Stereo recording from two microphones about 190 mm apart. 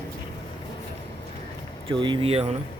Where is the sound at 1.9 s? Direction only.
25° right (ahead or behind).